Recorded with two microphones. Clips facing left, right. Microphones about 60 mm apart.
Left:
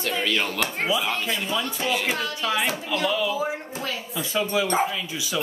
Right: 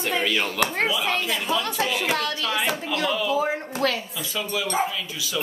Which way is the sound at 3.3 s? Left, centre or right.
Right.